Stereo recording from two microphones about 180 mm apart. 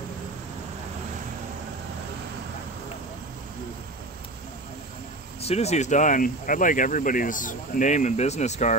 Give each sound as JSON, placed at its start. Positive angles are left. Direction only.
{"t": 5.4, "sound": "speech", "side_deg": 35}